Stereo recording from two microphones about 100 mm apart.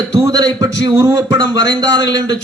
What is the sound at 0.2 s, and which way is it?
A man's voice, 35° right (ahead or behind).